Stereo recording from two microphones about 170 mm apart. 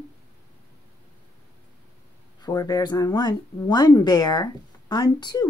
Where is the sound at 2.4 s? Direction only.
20° left (ahead or behind).